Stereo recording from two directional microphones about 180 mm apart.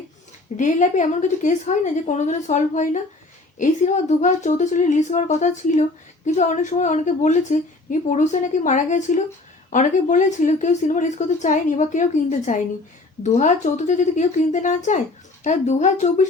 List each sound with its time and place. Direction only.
0.5 s a woman's voice: 45° left (ahead or behind)